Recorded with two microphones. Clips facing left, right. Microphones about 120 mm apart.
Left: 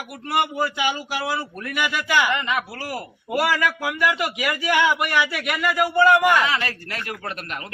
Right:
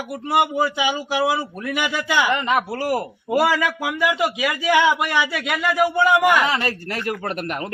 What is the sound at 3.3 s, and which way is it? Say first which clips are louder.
A man's voice: right 3 dB; 20° right (ahead or behind).